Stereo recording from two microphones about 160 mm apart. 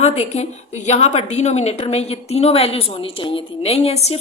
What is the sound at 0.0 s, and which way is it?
A woman's voice, 40° left (ahead or behind).